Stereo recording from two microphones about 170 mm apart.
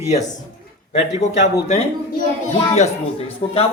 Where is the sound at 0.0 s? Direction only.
45° left (ahead or behind).